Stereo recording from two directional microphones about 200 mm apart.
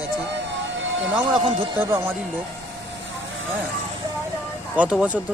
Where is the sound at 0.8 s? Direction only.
70° right (ahead or behind).